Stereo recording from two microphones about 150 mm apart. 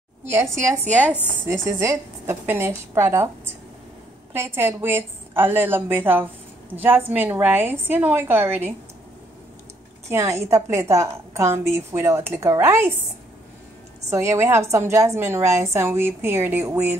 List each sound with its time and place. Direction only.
0.3 s a woman's voice: 20° right (ahead or behind)
4.3 s a woman's voice: 15° right (ahead or behind)
10.0 s a woman's voice: 20° right (ahead or behind)
14.1 s a woman's voice: 20° right (ahead or behind)